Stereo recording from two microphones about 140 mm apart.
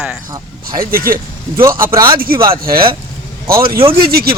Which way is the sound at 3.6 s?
90° right.